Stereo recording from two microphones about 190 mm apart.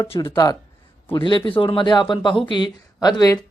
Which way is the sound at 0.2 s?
25° left (ahead or behind).